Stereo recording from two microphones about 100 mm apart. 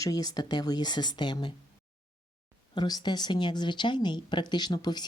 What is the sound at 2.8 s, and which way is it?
Speech, 45° left (ahead or behind).